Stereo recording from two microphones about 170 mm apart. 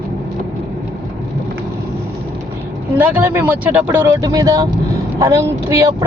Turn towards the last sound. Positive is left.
turn(degrees=-20)  # may be behind; listen again after turning